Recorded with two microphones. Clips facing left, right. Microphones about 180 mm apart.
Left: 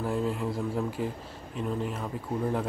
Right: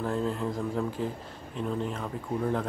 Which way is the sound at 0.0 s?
5° left (ahead or behind).